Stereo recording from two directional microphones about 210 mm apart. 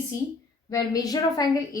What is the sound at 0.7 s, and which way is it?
A woman's voice, 15° left (ahead or behind).